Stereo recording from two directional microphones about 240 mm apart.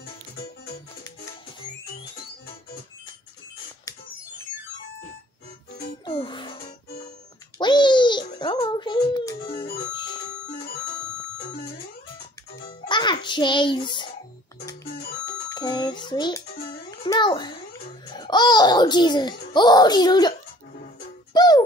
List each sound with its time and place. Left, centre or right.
6.0 s music: left
12.8 s music: centre
15.5 s a sound: centre
18.1 s babbling: centre
19.5 s a child's voice: centre
21.3 s music: centre